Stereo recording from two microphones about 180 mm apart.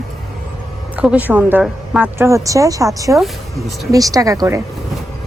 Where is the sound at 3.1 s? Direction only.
Centre (ahead or behind).